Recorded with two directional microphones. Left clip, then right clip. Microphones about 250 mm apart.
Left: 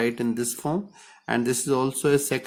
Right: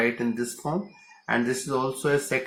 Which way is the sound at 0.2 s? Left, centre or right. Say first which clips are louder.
Left 2 dB; left.